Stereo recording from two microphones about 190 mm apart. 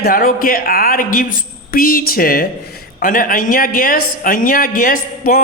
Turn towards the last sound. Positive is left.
turn(degrees=45)  # may be behind; listen again after turning